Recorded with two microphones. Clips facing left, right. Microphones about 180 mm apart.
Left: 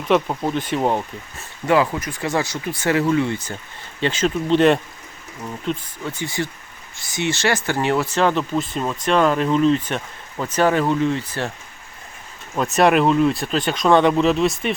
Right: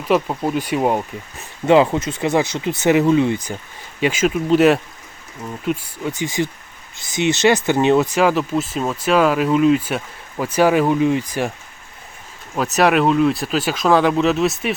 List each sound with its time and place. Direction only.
0.1 s speech: 5° right (ahead or behind)
1.6 s speech: 25° right (ahead or behind)
12.5 s speech: centre (ahead or behind)